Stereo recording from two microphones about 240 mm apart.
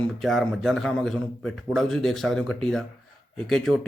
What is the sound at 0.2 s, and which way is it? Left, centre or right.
Speech, centre.